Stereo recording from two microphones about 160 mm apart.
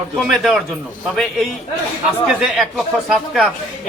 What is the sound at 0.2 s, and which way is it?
A man's voice, centre (ahead or behind).